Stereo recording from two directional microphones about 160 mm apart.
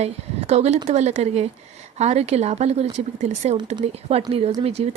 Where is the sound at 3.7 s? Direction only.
35° right (ahead or behind).